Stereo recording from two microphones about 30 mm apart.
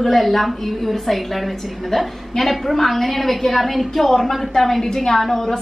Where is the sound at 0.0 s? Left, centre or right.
Centre.